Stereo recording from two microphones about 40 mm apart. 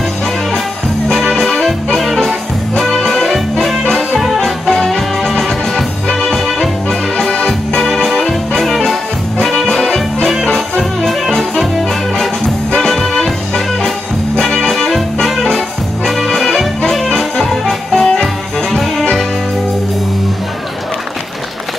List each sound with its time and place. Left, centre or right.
1.0 s music: centre
2.8 s music: centre
4.4 s music: centre
7.3 s organ: left
7.8 s music: centre
12.7 s music: centre
16.3 s music: centre